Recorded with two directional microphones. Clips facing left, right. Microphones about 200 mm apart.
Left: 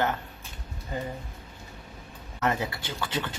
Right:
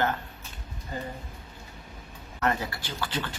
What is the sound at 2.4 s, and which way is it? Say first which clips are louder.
Speech: even; 20° left (ahead or behind).